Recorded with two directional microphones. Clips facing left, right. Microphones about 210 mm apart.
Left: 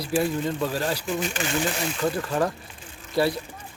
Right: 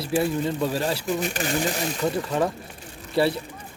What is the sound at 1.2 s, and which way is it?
Speech, 40° right (ahead or behind).